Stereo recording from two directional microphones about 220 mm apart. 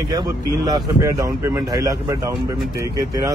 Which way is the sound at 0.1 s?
20° right (ahead or behind).